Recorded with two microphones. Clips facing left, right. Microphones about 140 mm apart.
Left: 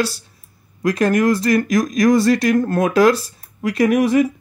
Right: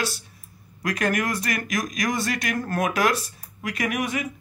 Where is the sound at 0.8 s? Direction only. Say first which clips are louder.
Left 9 dB; 25° left (ahead or behind).